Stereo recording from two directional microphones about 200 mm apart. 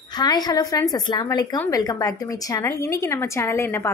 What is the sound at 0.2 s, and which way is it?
A woman's voice, 20° left (ahead or behind).